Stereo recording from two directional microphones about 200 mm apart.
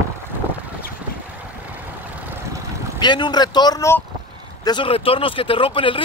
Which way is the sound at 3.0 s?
20° left (ahead or behind).